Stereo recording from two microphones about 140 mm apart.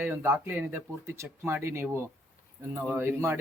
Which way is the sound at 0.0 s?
15° right (ahead or behind).